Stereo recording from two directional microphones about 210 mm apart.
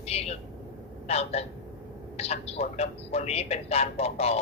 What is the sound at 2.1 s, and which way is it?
A man's voice, 30° left (ahead or behind).